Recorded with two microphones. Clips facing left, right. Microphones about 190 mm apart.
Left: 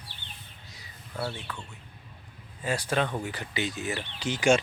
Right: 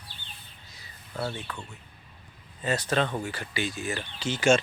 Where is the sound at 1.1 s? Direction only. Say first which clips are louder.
Right 1 dB; 5° left (ahead or behind).